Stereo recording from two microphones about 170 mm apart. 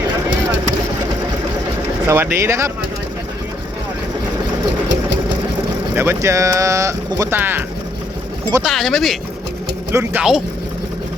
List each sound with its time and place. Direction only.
2.0 s speech: 15° right (ahead or behind)
5.9 s speech: 15° right (ahead or behind)
8.6 s speech: centre (ahead or behind)
9.9 s speech: 15° right (ahead or behind)